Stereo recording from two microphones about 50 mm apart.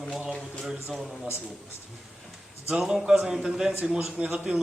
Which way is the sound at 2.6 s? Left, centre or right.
Centre.